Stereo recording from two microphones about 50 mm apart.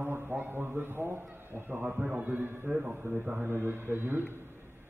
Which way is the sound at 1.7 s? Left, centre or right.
Right.